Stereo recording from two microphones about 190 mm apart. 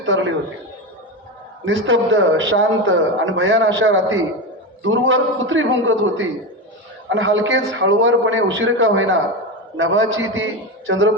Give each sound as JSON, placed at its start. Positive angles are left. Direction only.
{"t": 0.0, "sound": "a man's voice", "side_deg": -90}
{"t": 1.6, "sound": "a man's voice", "side_deg": -90}